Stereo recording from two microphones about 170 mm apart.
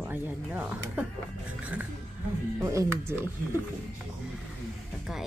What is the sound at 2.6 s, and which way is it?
Speech, 15° right (ahead or behind).